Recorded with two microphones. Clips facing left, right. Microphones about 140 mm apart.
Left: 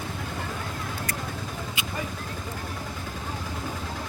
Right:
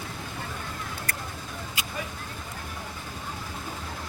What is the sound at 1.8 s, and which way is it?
Vehicle, 40° right (ahead or behind).